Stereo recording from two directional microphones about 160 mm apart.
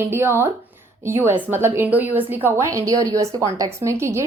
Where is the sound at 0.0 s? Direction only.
15° right (ahead or behind).